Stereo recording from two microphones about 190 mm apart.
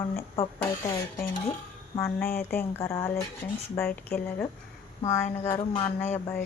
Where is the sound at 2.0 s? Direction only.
10° left (ahead or behind).